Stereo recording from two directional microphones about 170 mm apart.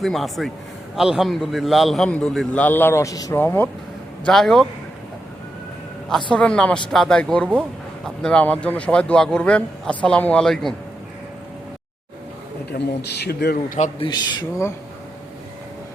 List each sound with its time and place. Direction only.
0.0 s a man's voice: centre (ahead or behind)
4.3 s speech: 5° left (ahead or behind)
6.3 s a man's voice: 5° left (ahead or behind)
12.7 s speech: 75° left (ahead or behind)
14.0 s a man's voice: 25° left (ahead or behind)